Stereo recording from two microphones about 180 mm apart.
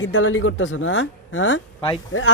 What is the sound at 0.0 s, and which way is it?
Speech, 90° left.